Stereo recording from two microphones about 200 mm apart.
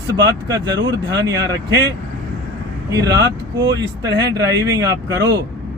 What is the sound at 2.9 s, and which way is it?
Speech, 20° right (ahead or behind).